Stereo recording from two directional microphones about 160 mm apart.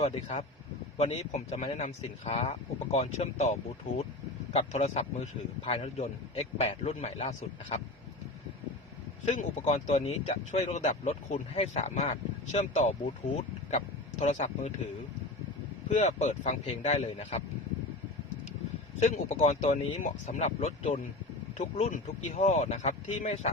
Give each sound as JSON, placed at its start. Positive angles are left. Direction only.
{"t": 0.0, "sound": "a man's voice", "side_deg": 40}
{"t": 9.2, "sound": "speech", "side_deg": 45}
{"t": 15.9, "sound": "speech", "side_deg": 45}
{"t": 18.9, "sound": "speech", "side_deg": 45}